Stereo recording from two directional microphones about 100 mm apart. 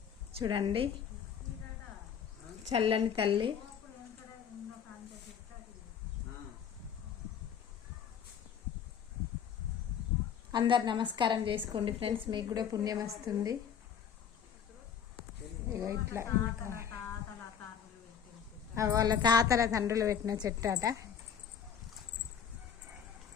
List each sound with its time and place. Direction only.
0.4 s a woman's voice: 60° right (ahead or behind)
2.7 s a woman's voice: 65° right (ahead or behind)
10.5 s a woman's voice: 50° right (ahead or behind)
15.7 s speech: 25° right (ahead or behind)
18.7 s a woman's voice: 30° right (ahead or behind)